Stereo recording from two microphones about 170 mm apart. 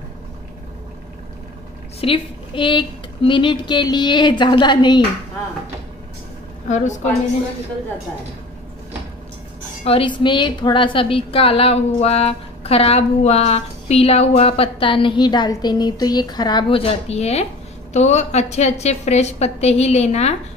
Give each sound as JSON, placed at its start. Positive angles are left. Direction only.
{"t": 2.0, "sound": "speech", "side_deg": 30}
{"t": 6.7, "sound": "a woman's voice", "side_deg": 45}
{"t": 9.8, "sound": "a woman's voice", "side_deg": 30}